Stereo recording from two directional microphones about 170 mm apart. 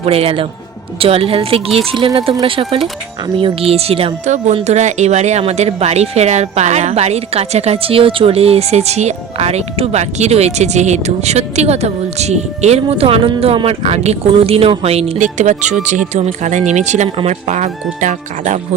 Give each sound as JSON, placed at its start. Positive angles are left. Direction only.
{"t": 0.0, "sound": "speech", "side_deg": -35}